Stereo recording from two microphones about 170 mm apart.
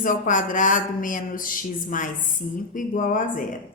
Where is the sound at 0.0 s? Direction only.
50° left (ahead or behind).